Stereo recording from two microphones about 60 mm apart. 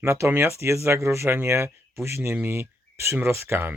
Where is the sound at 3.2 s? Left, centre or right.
Right.